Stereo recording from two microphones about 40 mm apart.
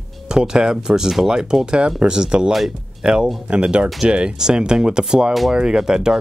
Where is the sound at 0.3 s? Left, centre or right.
Right.